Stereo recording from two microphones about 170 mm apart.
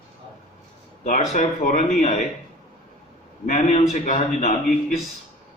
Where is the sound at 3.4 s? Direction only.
45° left (ahead or behind).